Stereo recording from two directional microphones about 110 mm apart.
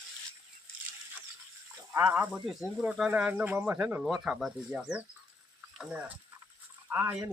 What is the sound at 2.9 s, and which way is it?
Speech, 10° right (ahead or behind).